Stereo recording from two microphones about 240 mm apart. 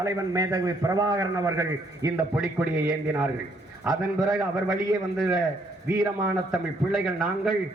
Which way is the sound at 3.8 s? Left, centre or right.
Centre.